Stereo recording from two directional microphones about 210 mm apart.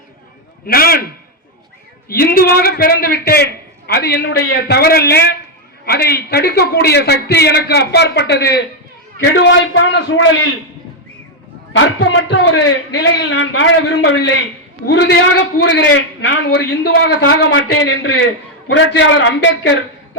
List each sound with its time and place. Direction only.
0.7 s a man's voice: 45° left (ahead or behind)
2.0 s a man's voice: 45° left (ahead or behind)
11.8 s a man's voice: 60° left (ahead or behind)